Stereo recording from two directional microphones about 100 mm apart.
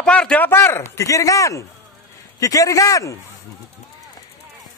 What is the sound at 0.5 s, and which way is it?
Speech, 25° left (ahead or behind).